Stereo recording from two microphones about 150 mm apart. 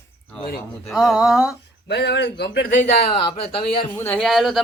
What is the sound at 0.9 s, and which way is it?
Speech, centre (ahead or behind).